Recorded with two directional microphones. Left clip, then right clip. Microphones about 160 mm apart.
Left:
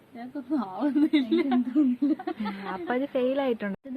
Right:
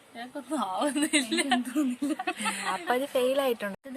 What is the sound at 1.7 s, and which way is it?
Speech, 30° right (ahead or behind).